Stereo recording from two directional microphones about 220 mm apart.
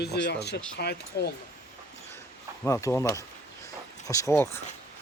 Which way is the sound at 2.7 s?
15° left (ahead or behind).